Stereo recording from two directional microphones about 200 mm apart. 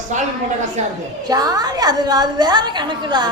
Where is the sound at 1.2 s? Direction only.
20° right (ahead or behind).